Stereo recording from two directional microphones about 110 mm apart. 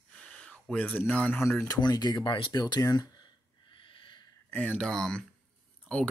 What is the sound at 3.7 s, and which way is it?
Owl, 50° left (ahead or behind).